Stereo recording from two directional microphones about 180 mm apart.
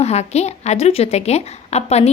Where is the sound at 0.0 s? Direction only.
35° left (ahead or behind).